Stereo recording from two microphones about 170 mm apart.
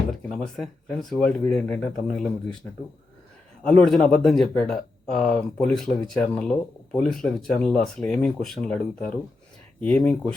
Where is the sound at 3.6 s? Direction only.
5° left (ahead or behind).